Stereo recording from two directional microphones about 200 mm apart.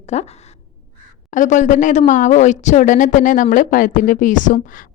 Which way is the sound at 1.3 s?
40° left (ahead or behind).